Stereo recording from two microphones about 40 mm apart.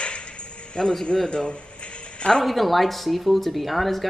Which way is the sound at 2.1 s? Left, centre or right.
Left.